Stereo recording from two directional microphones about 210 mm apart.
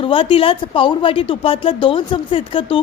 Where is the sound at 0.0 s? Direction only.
25° left (ahead or behind).